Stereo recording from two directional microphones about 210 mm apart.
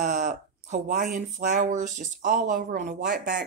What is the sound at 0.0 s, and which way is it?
Speech, 35° right (ahead or behind).